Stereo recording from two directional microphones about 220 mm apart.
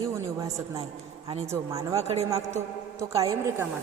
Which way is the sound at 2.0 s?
30° right (ahead or behind).